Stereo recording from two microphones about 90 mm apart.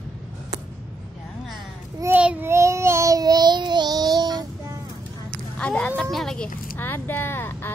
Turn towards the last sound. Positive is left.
turn(degrees=25)  # may be behind; listen again after turning